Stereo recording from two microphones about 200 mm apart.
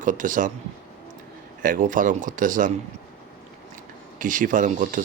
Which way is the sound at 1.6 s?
40° right (ahead or behind).